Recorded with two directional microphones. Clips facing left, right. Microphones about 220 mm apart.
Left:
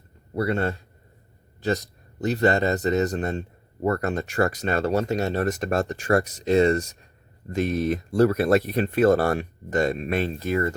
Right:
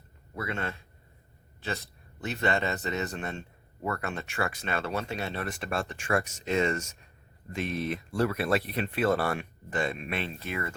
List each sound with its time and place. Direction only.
0.3 s speech: 35° left (ahead or behind)